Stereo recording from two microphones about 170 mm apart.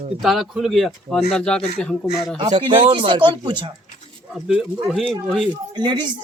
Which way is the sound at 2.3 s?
30° right (ahead or behind).